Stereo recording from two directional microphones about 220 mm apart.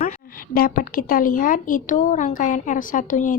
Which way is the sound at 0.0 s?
40° left (ahead or behind).